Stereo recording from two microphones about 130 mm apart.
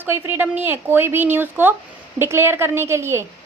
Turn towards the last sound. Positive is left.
turn(degrees=-20)  # may be behind; listen again after turning